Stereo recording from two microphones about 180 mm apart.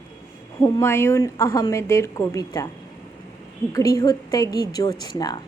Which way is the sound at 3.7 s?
20° left (ahead or behind).